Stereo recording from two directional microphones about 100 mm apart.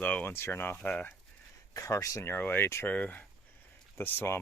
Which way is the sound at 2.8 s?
15° left (ahead or behind).